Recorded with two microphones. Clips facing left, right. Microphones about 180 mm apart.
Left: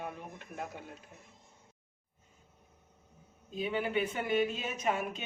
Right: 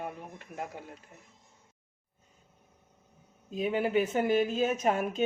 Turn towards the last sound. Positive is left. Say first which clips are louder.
# right 5 dB
turn(degrees=-50)  # may be behind; listen again after turning